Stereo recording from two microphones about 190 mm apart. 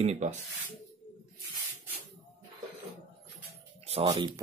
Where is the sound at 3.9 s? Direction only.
30° right (ahead or behind).